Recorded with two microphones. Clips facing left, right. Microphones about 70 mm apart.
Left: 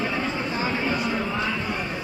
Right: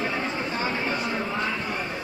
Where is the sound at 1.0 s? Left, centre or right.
Centre.